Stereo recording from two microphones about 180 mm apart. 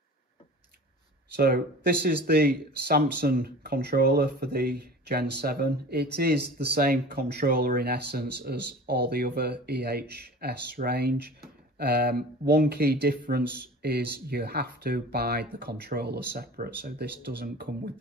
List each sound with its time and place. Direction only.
1.3 s speech: 55° right (ahead or behind)